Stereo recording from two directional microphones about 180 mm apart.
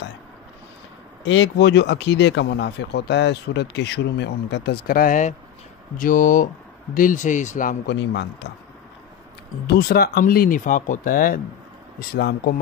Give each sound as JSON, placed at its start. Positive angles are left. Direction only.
{"t": 1.2, "sound": "speech", "side_deg": 90}
{"t": 7.8, "sound": "speech", "side_deg": 70}
{"t": 9.7, "sound": "speech", "side_deg": 60}